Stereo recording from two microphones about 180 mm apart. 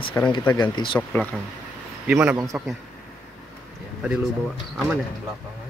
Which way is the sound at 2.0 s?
10° right (ahead or behind).